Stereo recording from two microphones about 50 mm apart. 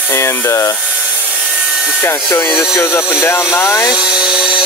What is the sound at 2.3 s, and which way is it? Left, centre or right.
Speech, left.